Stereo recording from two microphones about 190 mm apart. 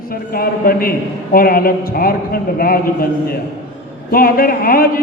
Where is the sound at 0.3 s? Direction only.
50° left (ahead or behind).